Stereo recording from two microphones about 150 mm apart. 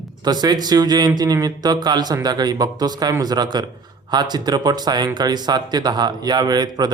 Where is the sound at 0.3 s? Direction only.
25° right (ahead or behind).